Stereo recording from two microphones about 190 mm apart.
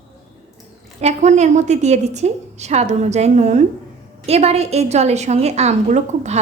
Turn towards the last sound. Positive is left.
turn(degrees=-35)  # may be behind; listen again after turning